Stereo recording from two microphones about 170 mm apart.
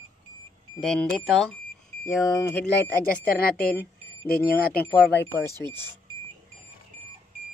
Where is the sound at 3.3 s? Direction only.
60° left (ahead or behind).